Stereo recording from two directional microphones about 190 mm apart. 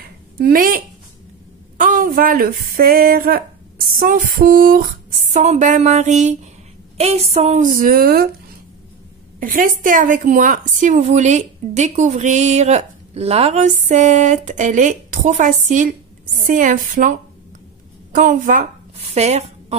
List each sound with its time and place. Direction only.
0.4 s a woman's voice: 50° right (ahead or behind)
9.4 s a woman's voice: 45° right (ahead or behind)